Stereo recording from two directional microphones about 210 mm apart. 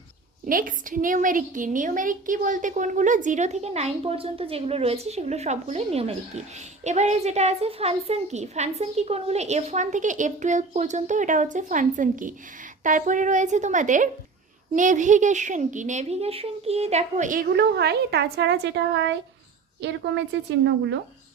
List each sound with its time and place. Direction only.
0.4 s a woman's voice: 40° right (ahead or behind)
17.6 s a woman's voice: 55° right (ahead or behind)